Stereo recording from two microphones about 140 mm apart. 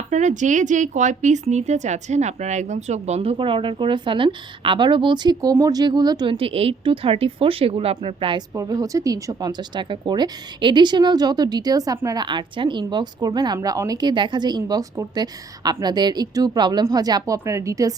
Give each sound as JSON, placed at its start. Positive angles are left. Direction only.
{"t": 0.1, "sound": "speech", "side_deg": -60}
{"t": 8.5, "sound": "a woman's voice", "side_deg": -25}